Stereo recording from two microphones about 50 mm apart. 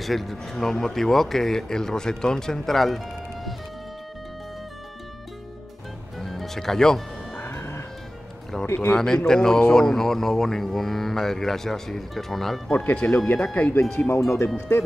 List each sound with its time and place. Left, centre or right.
0.0 s speech: centre
6.1 s music: centre
7.4 s music: left
8.5 s speech: centre
12.7 s speech: left
13.7 s speech: left